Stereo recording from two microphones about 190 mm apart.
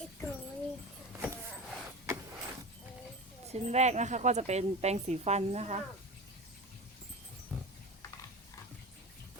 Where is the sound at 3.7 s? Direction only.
35° right (ahead or behind).